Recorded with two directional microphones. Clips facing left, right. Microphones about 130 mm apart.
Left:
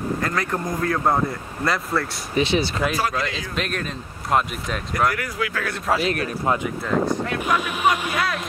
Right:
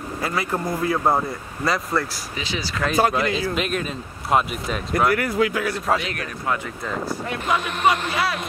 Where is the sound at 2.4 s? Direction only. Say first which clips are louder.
Left 10 dB; 60° left (ahead or behind).